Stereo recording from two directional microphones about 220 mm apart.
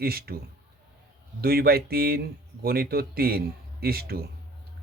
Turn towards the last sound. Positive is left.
turn(degrees=-45)  # may be behind; listen again after turning